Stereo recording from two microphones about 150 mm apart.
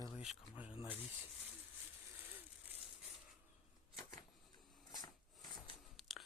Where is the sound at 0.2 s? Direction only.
5° right (ahead or behind).